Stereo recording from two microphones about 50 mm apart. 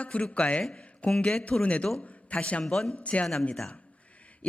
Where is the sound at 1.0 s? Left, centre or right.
Centre.